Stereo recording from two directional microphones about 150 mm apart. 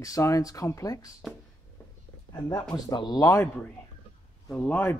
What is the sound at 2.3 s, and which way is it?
Speech, 30° left (ahead or behind).